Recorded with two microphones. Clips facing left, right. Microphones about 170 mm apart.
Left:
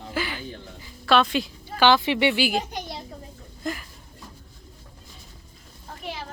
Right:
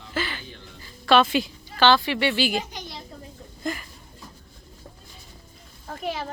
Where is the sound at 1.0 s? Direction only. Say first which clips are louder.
Right 2 dB; centre (ahead or behind).